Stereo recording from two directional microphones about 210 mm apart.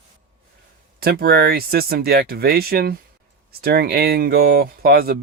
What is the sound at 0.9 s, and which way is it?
Speech, 45° right (ahead or behind).